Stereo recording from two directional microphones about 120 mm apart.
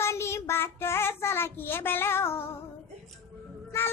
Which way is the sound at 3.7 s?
20° left (ahead or behind).